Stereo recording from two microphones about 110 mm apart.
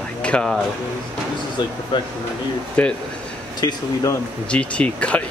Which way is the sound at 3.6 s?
40° left (ahead or behind).